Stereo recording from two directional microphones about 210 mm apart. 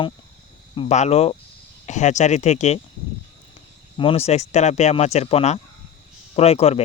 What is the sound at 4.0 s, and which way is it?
Speech, 25° left (ahead or behind).